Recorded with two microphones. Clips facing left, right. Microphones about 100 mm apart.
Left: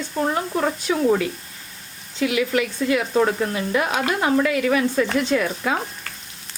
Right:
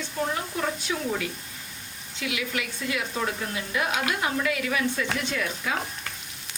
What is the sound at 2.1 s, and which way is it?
Stir, 40° left (ahead or behind).